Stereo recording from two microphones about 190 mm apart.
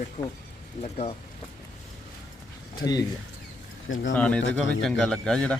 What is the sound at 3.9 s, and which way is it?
Speech, 90° left.